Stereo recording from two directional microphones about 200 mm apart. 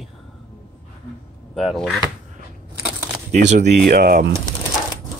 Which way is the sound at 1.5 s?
Centre (ahead or behind).